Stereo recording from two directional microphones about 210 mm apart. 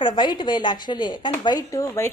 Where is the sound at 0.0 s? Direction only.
20° left (ahead or behind).